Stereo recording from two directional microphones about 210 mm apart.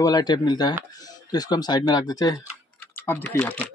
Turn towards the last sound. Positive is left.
turn(degrees=10)  # may be behind; listen again after turning